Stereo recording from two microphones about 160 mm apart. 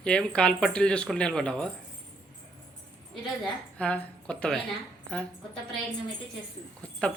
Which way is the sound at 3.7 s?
10° left (ahead or behind).